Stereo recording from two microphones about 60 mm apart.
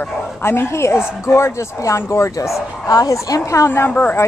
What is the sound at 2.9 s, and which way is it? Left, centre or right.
Speech, left.